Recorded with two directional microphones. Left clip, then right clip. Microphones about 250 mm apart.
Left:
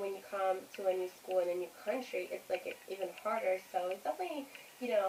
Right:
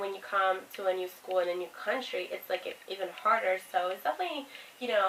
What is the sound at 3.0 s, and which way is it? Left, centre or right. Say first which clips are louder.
A woman's voice: right 8 dB; centre.